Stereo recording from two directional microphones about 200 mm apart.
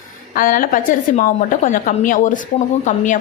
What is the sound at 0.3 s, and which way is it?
A woman's voice, 45° left (ahead or behind).